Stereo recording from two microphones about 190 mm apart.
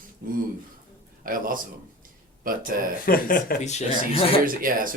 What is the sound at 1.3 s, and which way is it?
Speech, 45° right (ahead or behind).